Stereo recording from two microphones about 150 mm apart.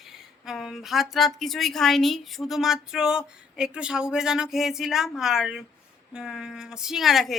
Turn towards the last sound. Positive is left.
turn(degrees=0)  # may be behind; listen again after turning